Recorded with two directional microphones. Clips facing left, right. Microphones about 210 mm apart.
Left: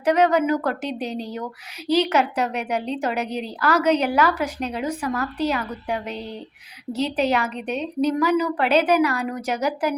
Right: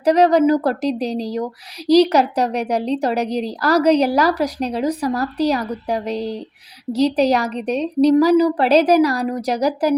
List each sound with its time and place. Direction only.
0.0 s a woman's voice: 35° right (ahead or behind)